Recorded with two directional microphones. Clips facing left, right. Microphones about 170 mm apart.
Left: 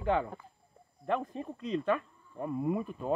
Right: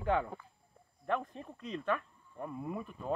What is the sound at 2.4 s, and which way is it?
Speech, 15° left (ahead or behind).